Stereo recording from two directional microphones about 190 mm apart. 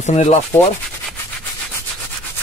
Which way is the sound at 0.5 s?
15° left (ahead or behind).